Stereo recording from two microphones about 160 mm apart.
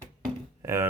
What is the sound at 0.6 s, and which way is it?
Speech, 20° right (ahead or behind).